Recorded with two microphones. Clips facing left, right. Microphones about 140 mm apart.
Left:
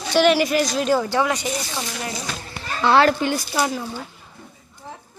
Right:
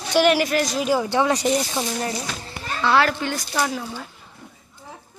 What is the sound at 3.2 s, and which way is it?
Speech, 15° left (ahead or behind).